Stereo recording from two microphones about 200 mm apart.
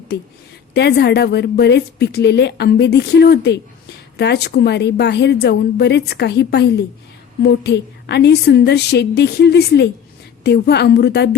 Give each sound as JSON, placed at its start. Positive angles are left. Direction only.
{"t": 0.7, "sound": "a woman's voice", "side_deg": 55}